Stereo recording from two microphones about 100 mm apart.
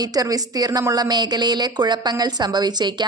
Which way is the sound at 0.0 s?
40° right (ahead or behind).